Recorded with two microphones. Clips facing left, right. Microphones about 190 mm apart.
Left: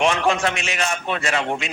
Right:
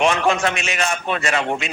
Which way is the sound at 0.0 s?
55° right (ahead or behind).